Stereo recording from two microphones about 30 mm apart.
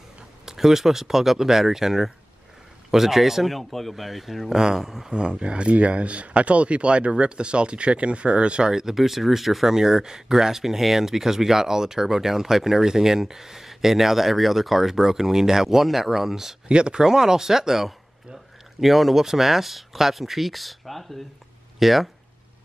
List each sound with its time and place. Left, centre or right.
0.5 s speech: centre
3.5 s speech: centre
4.5 s speech: centre
5.1 s speech: right
8.9 s speech: centre
16.6 s speech: right
17.0 s speech: centre